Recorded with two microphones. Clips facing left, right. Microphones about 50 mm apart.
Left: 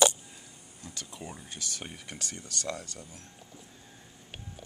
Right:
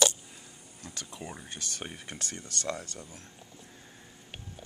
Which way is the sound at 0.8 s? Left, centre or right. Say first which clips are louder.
Right 1 dB; centre.